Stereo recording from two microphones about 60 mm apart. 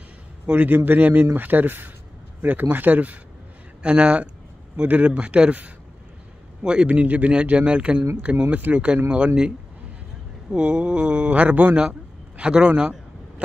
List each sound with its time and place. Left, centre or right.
0.5 s speech: right
10.5 s a man's voice: centre